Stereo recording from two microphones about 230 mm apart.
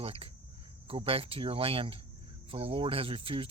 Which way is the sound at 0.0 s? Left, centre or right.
Right.